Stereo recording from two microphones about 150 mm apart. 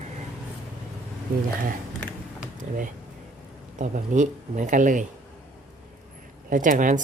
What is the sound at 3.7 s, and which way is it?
Speech, 55° right (ahead or behind).